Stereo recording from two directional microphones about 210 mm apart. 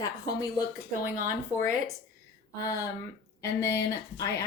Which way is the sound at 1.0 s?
40° right (ahead or behind).